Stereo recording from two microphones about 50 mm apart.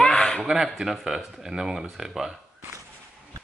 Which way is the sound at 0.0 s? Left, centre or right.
Centre.